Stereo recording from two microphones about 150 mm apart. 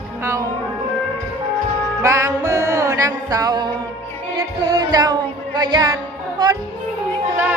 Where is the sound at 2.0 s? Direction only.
20° right (ahead or behind).